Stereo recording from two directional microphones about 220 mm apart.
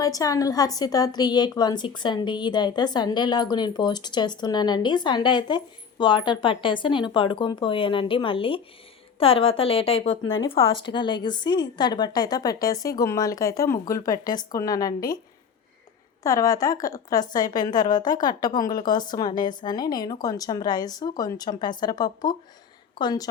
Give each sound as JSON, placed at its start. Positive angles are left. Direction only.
{"t": 0.0, "sound": "a woman's voice", "side_deg": 15}
{"t": 16.2, "sound": "a woman's voice", "side_deg": 15}